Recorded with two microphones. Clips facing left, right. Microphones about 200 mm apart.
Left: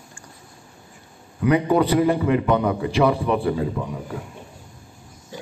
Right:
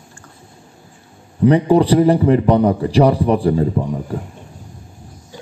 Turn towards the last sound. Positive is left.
turn(degrees=-40)  # may be behind; listen again after turning